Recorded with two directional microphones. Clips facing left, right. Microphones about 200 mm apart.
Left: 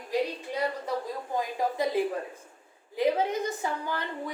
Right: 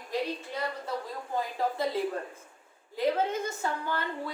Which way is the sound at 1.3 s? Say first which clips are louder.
Left 1 dB; 15° left (ahead or behind).